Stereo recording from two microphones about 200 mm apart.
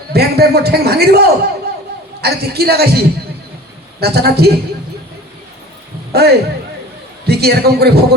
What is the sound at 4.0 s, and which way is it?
Speech, 50° right (ahead or behind).